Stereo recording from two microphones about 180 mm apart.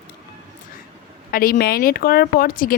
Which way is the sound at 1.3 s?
55° left (ahead or behind).